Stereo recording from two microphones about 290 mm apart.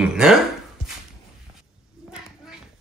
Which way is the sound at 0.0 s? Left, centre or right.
Centre.